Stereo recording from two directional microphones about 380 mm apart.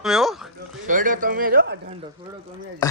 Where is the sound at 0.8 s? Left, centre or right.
Centre.